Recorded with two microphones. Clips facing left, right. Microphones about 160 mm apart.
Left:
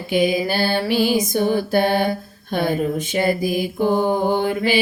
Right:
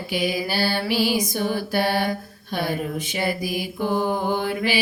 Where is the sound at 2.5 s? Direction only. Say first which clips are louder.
Left 5 dB; 50° left (ahead or behind).